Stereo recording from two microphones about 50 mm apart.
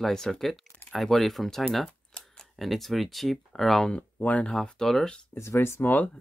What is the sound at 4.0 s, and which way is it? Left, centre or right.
Speech, left.